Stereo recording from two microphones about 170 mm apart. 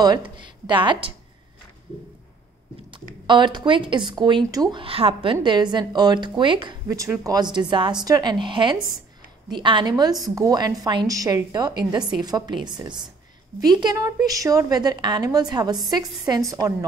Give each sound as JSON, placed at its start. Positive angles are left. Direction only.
{"t": 0.0, "sound": "a woman's voice", "side_deg": -25}
{"t": 2.9, "sound": "speech", "side_deg": -25}